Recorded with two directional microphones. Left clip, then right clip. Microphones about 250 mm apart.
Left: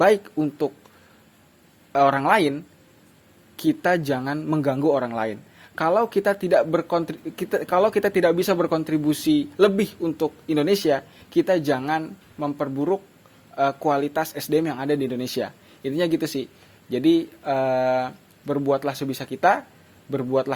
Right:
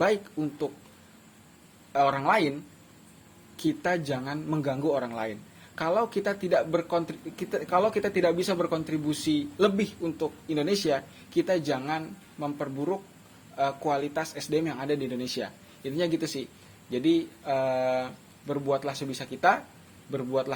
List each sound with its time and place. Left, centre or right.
0.0 s speech: left
1.9 s speech: left
3.6 s speech: left